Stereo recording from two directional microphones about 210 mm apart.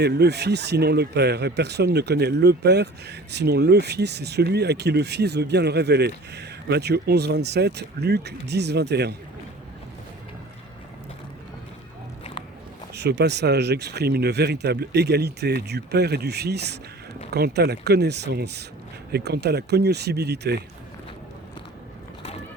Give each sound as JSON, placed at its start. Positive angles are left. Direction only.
{"t": 0.0, "sound": "speech", "side_deg": -50}
{"t": 12.9, "sound": "speech", "side_deg": -50}